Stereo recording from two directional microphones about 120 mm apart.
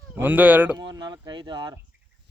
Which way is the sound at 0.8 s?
35° right (ahead or behind).